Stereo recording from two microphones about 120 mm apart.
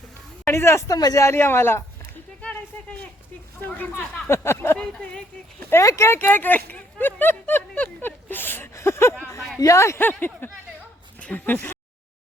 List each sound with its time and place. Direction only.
0.4 s a woman's voice: 20° left (ahead or behind)
2.4 s a sound: 10° left (ahead or behind)
3.6 s a woman's voice: 15° left (ahead or behind)
4.8 s speech: 5° left (ahead or behind)
5.7 s a woman's voice: 25° left (ahead or behind)